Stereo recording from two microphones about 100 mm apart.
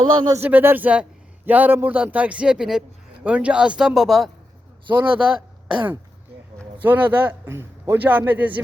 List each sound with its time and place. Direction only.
0.0 s speech: 50° right (ahead or behind)
0.3 s speech: 20° right (ahead or behind); by 4.3 s centre (ahead or behind)
4.9 s a man's voice: 20° right (ahead or behind)
6.8 s a man's voice: 20° right (ahead or behind)